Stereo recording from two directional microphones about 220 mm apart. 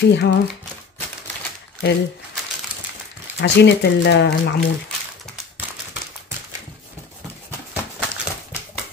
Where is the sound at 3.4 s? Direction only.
50° left (ahead or behind).